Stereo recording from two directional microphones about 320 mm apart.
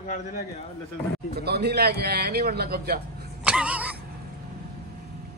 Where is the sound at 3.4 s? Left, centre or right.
Centre.